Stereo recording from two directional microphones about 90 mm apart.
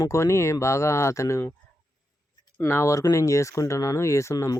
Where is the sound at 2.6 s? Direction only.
30° left (ahead or behind).